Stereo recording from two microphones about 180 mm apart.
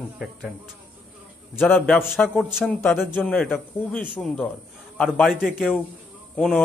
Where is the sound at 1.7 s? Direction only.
10° left (ahead or behind).